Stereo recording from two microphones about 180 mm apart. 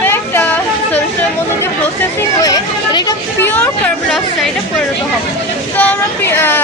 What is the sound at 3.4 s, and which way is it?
Speech, 10° left (ahead or behind).